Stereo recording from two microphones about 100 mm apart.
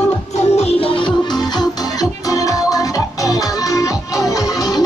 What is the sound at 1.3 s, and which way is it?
Music, 40° left (ahead or behind).